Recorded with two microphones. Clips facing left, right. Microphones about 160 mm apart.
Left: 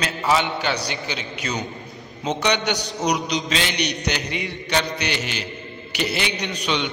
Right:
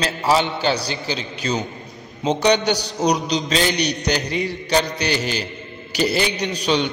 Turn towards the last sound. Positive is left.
turn(degrees=-35)  # may be behind; listen again after turning